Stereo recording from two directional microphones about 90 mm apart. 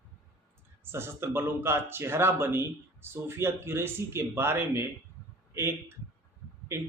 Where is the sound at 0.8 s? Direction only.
25° right (ahead or behind).